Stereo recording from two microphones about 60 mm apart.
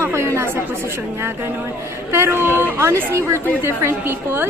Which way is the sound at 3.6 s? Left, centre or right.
Right.